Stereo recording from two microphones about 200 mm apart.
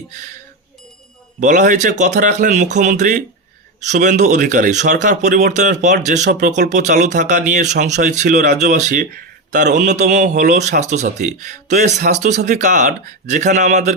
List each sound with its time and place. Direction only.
1.4 s speech: 40° right (ahead or behind)